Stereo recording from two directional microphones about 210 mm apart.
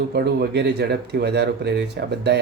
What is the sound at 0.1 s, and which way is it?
Speech, 50° right (ahead or behind).